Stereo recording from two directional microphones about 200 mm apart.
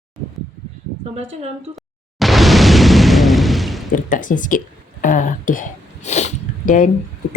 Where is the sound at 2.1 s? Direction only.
Centre (ahead or behind).